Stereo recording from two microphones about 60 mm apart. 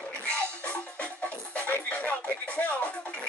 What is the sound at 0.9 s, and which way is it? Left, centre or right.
Music, left.